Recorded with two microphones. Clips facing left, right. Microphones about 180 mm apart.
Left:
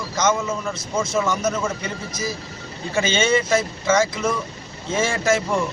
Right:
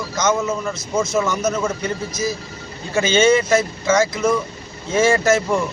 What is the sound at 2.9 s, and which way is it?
Speech, 5° right (ahead or behind).